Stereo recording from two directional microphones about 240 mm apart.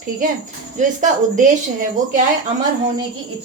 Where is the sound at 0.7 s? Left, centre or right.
Right.